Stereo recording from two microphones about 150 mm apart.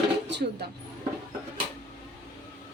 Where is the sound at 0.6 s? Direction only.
90° right.